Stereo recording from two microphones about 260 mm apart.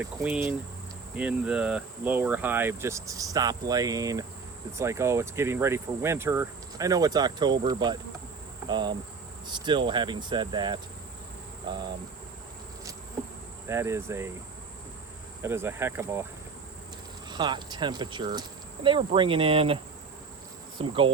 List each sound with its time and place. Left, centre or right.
0.0 s speech: centre
13.7 s speech: centre
15.4 s speech: centre
17.2 s speech: centre
20.8 s insect: centre